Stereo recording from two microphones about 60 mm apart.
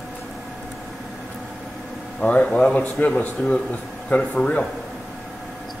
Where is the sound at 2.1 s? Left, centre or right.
Centre.